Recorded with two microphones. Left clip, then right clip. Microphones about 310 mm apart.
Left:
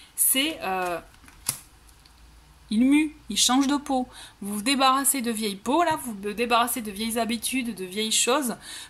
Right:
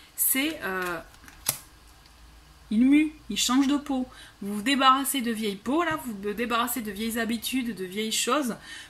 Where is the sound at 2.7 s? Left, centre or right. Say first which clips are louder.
Even; centre.